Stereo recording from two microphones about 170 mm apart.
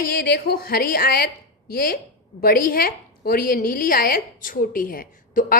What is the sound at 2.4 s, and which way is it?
A woman's voice, 60° left (ahead or behind).